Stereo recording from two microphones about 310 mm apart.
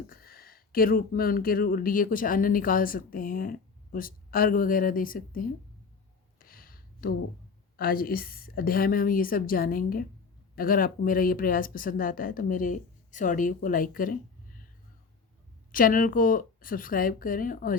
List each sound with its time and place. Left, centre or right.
0.1 s speech: left
6.4 s a sound: left
7.8 s speech: left
15.7 s speech: left